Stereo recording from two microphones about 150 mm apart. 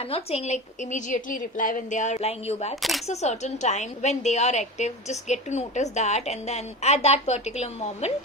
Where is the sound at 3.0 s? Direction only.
45° left (ahead or behind).